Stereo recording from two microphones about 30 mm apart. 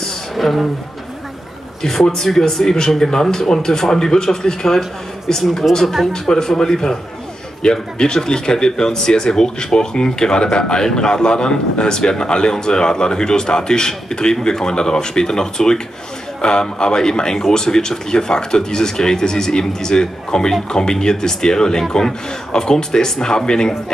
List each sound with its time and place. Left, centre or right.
0.4 s speech: centre
1.8 s speech: centre